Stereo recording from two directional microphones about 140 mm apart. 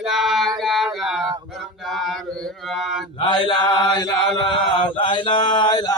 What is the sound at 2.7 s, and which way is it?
Mantra, centre (ahead or behind).